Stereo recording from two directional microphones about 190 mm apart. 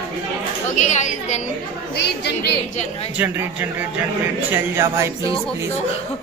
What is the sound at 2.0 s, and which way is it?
Speech, 65° left (ahead or behind).